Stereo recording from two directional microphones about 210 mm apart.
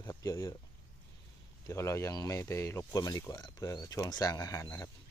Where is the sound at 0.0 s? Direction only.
15° left (ahead or behind).